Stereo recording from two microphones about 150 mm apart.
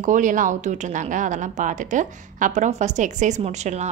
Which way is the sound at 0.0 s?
60° right (ahead or behind).